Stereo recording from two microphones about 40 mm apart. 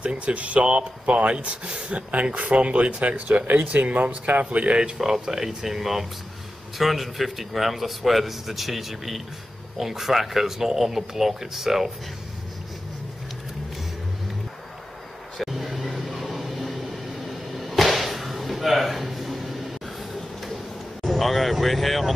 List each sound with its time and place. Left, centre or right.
0.0 s speech: right
3.4 s speech: right
5.0 s speech: centre
15.3 s vehicle: centre
21.0 s vehicle: centre